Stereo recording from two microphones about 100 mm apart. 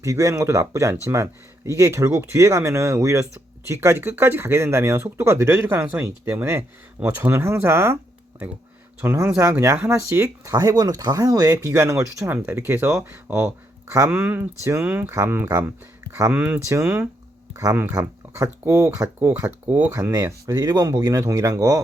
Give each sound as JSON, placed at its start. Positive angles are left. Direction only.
{"t": 0.0, "sound": "speech", "side_deg": -30}
{"t": 9.0, "sound": "speech", "side_deg": -20}
{"t": 14.1, "sound": "speech", "side_deg": -15}
{"t": 14.6, "sound": "speech", "side_deg": -25}
{"t": 17.5, "sound": "speech", "side_deg": -30}